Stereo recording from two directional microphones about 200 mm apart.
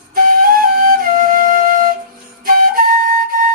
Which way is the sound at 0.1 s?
45° right (ahead or behind).